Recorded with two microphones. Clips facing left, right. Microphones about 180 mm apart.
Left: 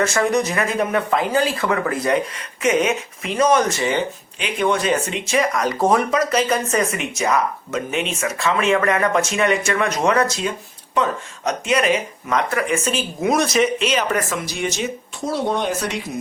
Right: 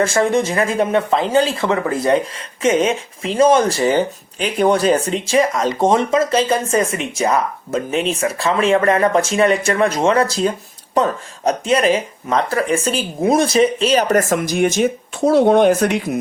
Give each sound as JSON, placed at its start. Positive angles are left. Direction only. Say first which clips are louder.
{"t": 0.0, "sound": "speech", "louder": "right 3 dB", "side_deg": -30}